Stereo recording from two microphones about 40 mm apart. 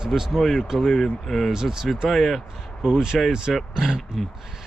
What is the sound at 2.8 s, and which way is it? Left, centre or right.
Speech, centre.